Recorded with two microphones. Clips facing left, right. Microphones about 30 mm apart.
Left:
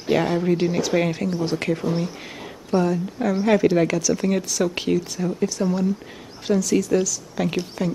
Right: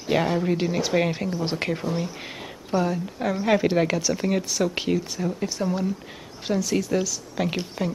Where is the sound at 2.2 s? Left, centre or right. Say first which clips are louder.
Even; centre.